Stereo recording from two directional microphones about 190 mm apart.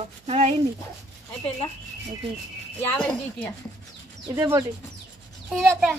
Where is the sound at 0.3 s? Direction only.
35° right (ahead or behind).